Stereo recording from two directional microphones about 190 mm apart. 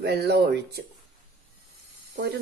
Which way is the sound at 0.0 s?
60° right (ahead or behind).